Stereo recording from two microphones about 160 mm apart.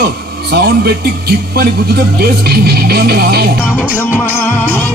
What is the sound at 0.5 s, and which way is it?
A man's voice, 80° right.